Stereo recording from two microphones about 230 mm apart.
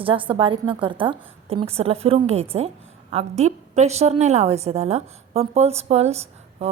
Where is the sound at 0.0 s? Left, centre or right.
Right.